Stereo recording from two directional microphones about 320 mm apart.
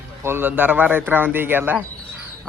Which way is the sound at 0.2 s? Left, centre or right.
Centre.